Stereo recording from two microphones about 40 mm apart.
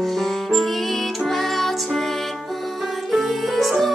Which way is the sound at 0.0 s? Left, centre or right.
Centre.